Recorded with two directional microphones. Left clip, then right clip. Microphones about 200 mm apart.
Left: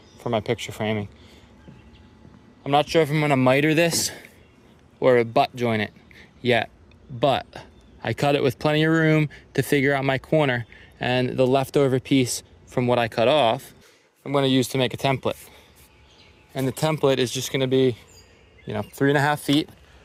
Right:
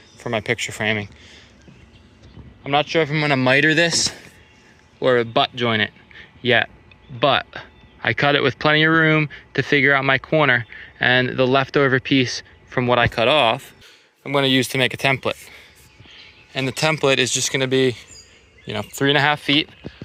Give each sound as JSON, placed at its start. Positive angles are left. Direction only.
{"t": 0.2, "sound": "speech", "side_deg": 5}
{"t": 2.6, "sound": "speech", "side_deg": 15}
{"t": 19.1, "sound": "speech", "side_deg": 20}